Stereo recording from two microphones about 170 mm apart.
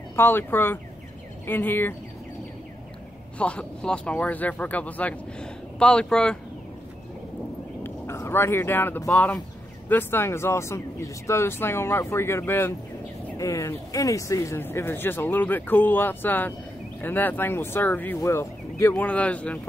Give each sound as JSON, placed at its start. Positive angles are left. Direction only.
{"t": 0.1, "sound": "speech", "side_deg": 15}
{"t": 3.3, "sound": "speech", "side_deg": 5}
{"t": 7.8, "sound": "speech", "side_deg": 15}